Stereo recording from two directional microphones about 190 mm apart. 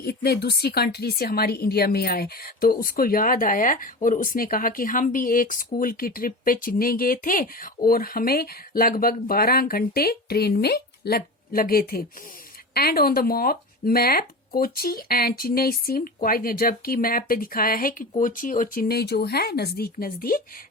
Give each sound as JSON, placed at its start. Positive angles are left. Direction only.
{"t": 0.0, "sound": "speech", "side_deg": 55}